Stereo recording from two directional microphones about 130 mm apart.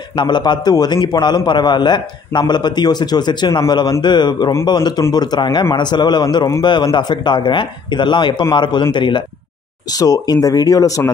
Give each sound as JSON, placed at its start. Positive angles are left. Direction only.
{"t": 0.1, "sound": "a man's voice", "side_deg": 35}